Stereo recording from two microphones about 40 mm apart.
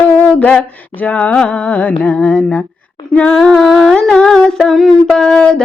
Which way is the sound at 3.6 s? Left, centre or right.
Centre.